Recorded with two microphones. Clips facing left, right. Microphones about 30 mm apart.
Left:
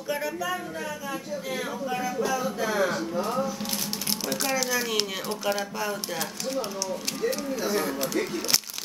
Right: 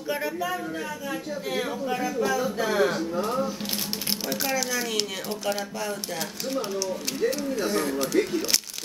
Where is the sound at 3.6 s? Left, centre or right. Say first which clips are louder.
Right 1 dB; right.